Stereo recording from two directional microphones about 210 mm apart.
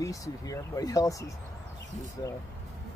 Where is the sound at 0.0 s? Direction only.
15° left (ahead or behind).